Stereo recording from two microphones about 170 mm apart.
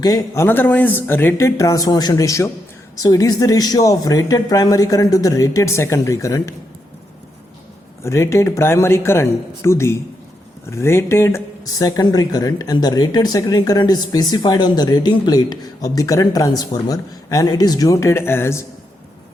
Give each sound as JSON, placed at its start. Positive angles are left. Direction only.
{"t": 0.0, "sound": "speech", "side_deg": 20}
{"t": 8.0, "sound": "speech", "side_deg": 15}